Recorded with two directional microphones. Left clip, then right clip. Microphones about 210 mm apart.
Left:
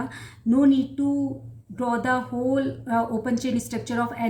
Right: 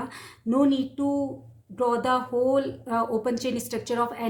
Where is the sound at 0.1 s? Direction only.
25° right (ahead or behind).